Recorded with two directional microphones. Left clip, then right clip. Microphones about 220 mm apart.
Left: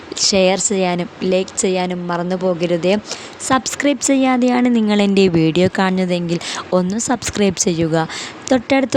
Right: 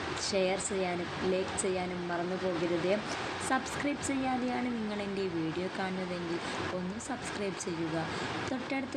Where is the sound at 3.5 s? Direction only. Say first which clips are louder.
Left 18 dB; 50° left (ahead or behind).